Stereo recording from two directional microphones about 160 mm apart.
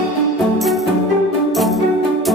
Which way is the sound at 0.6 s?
Centre (ahead or behind).